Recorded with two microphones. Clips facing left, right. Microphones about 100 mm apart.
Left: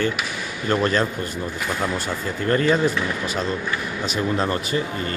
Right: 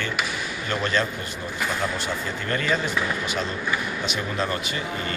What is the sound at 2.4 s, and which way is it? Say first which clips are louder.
Speech: left 8 dB; 35° left (ahead or behind).